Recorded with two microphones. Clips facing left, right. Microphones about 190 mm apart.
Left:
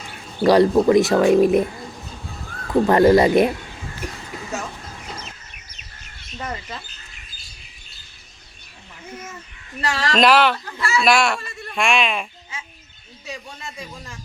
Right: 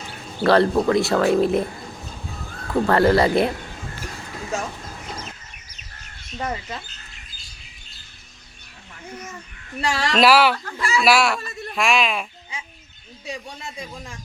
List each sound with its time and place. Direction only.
0.4 s speech: 15° left (ahead or behind)
2.8 s speech: 15° left (ahead or behind)
6.3 s speech: 20° right (ahead or behind)
9.8 s speech: 10° right (ahead or behind)
11.0 s speech: 5° right (ahead or behind)